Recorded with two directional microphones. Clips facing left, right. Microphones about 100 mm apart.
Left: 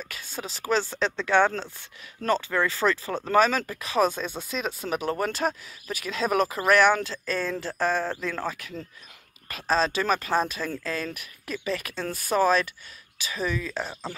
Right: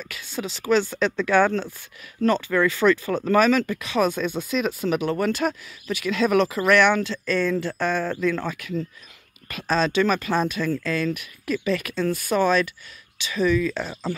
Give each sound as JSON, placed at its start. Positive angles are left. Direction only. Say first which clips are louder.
{"t": 0.0, "sound": "speech", "louder": "right 5 dB", "side_deg": 35}